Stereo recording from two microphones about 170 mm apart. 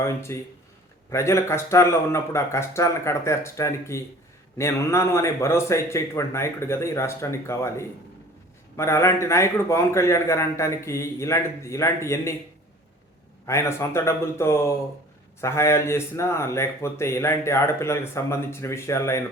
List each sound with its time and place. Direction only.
0.0 s speech: 15° left (ahead or behind)
13.4 s speech: 15° left (ahead or behind)